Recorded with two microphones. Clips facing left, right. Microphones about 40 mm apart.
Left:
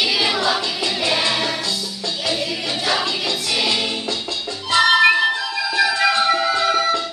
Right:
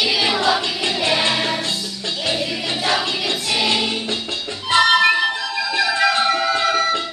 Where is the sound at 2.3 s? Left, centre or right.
Centre.